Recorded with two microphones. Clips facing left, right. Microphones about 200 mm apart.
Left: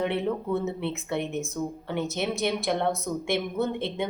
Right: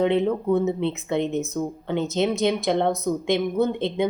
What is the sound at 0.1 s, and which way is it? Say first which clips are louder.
A woman's voice: right 6 dB; 20° right (ahead or behind).